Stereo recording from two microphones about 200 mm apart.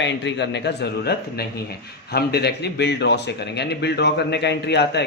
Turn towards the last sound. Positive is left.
turn(degrees=60)  # may be behind; listen again after turning